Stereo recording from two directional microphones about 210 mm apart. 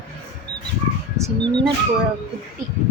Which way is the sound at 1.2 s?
20° right (ahead or behind).